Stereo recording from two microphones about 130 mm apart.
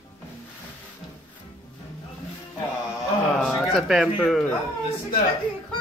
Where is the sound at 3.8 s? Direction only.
Centre (ahead or behind).